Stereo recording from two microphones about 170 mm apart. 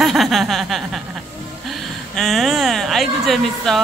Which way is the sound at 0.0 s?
Centre (ahead or behind).